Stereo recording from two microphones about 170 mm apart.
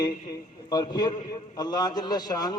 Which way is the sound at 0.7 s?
25° left (ahead or behind).